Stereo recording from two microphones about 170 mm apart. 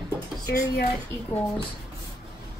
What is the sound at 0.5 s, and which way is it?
Speech, 65° left (ahead or behind).